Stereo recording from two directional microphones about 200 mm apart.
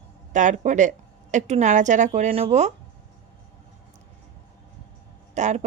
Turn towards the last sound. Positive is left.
turn(degrees=-35)  # may be behind; listen again after turning